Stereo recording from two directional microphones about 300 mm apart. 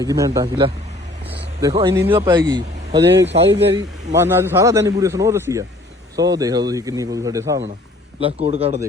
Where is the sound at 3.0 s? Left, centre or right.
Right.